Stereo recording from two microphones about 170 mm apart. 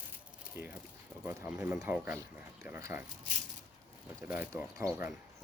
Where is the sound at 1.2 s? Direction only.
10° right (ahead or behind).